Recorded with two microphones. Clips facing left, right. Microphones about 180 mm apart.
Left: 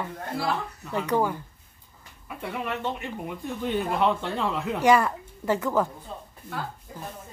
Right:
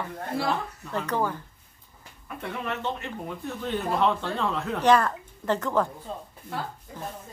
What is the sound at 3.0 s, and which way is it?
Speech, 15° left (ahead or behind).